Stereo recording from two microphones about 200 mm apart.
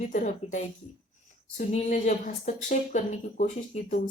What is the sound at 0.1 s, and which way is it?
Speech, 40° left (ahead or behind).